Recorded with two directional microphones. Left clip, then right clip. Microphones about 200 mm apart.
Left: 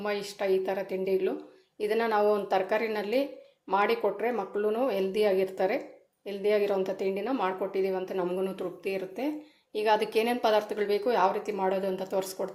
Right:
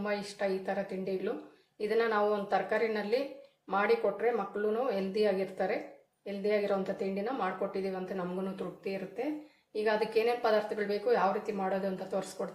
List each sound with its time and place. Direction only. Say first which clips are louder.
0.0 s speech: left 3 dB; 45° left (ahead or behind)